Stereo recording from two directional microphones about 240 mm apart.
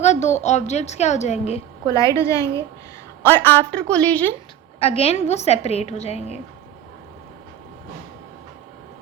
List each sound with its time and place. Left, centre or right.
0.0 s a woman's voice: left
1.9 s a woman's voice: centre
4.8 s a woman's voice: left